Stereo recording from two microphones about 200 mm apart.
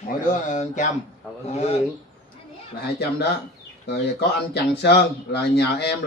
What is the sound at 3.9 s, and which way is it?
Speech, 55° left (ahead or behind).